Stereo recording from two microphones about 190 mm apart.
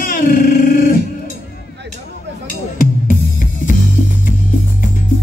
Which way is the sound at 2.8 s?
45° left (ahead or behind).